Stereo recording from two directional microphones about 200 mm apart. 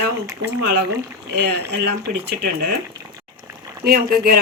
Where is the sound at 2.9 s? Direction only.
15° right (ahead or behind).